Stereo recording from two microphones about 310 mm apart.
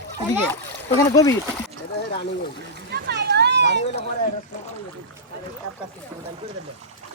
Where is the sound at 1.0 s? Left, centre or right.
Centre.